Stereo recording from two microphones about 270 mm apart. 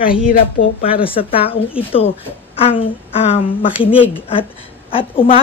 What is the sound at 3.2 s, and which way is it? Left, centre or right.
Speech, left.